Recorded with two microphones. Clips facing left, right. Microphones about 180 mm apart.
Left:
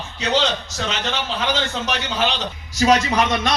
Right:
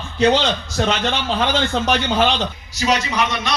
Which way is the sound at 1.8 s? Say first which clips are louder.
Right 5 dB; 55° right (ahead or behind).